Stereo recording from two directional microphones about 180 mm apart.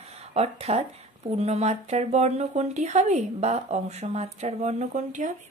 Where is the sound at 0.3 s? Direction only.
35° right (ahead or behind).